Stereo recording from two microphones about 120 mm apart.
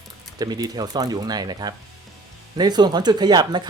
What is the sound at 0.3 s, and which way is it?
Speech, 30° right (ahead or behind).